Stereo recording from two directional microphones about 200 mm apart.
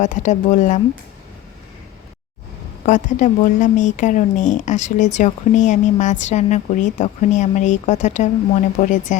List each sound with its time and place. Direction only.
0.0 s speech: 35° left (ahead or behind)
2.8 s speech: 40° left (ahead or behind)